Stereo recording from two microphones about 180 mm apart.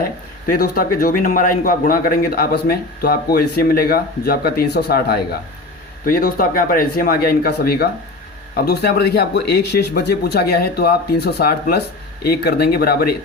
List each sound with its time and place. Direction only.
0.5 s a man's voice: 55° left (ahead or behind)